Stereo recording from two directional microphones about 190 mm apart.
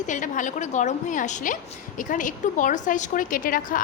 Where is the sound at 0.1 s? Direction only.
40° left (ahead or behind).